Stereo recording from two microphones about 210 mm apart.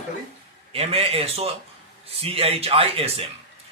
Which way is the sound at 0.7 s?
25° right (ahead or behind).